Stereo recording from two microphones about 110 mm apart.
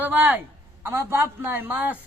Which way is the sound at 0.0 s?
15° right (ahead or behind).